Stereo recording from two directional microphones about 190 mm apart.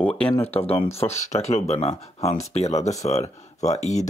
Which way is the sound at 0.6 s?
30° left (ahead or behind).